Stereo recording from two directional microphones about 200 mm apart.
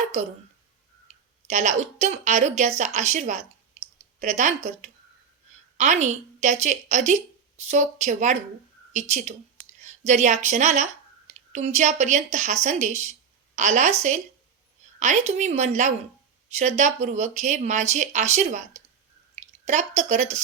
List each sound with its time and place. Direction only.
1.0 s speech: 35° right (ahead or behind)